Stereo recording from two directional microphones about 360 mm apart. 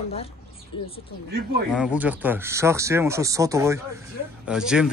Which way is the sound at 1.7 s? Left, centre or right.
Centre.